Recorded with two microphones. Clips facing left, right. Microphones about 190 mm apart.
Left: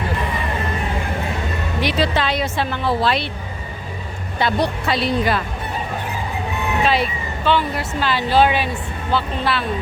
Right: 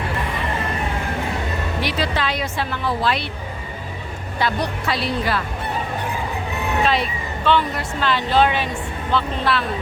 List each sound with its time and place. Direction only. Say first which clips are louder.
1.8 s a woman's voice: left 4 dB; 25° left (ahead or behind)
4.4 s a woman's voice: left 3 dB; 25° left (ahead or behind)
6.8 s speech: left 4 dB; centre (ahead or behind)